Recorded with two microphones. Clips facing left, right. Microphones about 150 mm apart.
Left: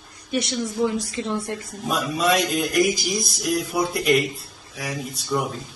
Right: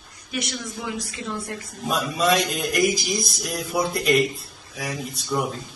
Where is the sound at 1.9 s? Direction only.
Centre (ahead or behind).